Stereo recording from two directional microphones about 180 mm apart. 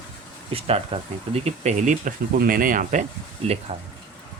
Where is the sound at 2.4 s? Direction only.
50° right (ahead or behind).